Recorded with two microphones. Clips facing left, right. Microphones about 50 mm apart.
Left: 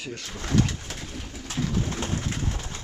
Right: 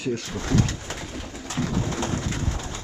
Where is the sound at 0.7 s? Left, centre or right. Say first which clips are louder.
Right 3 dB; right.